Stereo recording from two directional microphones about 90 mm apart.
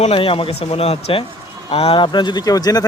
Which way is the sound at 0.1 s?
90° left.